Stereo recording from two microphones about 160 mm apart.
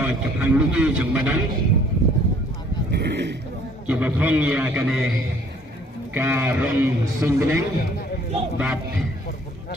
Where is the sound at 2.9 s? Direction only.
90° right.